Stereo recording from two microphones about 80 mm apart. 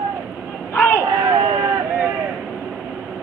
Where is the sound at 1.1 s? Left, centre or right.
Right.